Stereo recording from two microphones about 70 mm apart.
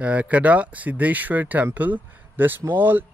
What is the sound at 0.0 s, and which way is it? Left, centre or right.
Speech, centre.